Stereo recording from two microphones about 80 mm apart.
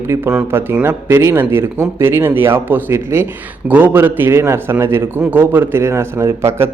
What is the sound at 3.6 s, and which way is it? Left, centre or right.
A man's voice, right.